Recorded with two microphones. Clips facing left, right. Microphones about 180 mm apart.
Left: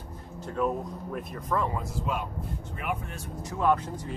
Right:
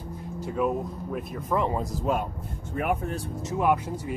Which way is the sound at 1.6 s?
25° right (ahead or behind).